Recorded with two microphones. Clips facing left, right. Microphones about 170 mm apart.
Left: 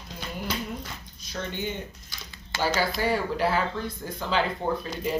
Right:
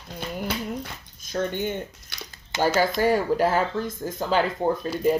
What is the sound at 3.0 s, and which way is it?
Speech, 45° right (ahead or behind).